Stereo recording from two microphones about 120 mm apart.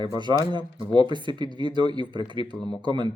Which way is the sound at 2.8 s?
40° right (ahead or behind).